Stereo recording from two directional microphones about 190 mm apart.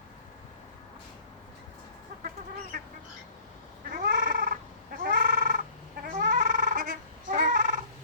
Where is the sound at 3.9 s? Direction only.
45° right (ahead or behind).